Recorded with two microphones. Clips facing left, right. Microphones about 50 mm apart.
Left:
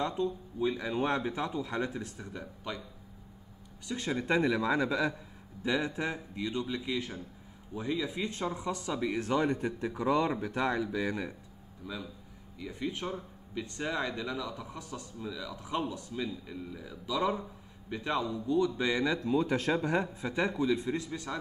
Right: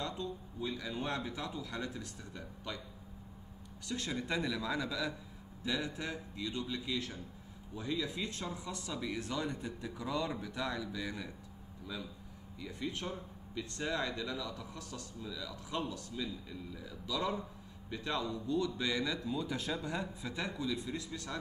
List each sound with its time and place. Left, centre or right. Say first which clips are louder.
0.0 s speech: left 8 dB; left
3.8 s speech: left 5 dB; left
11.8 s speech: left 3 dB; centre; by 19.1 s left
19.1 s speech: left 8 dB; left
19.7 s speech: left 8 dB; left